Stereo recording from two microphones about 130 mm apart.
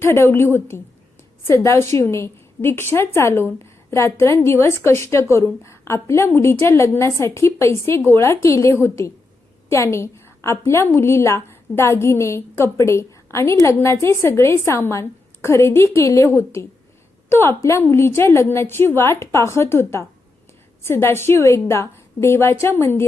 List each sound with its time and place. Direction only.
0.0 s a woman's voice: 20° left (ahead or behind)